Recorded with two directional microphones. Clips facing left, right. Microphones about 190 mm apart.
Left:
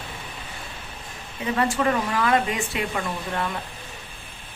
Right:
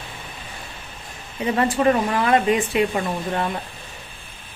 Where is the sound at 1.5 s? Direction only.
20° right (ahead or behind).